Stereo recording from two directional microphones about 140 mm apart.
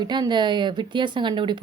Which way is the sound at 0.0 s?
30° right (ahead or behind).